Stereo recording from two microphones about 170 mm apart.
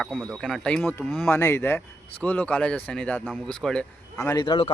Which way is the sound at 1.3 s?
15° left (ahead or behind).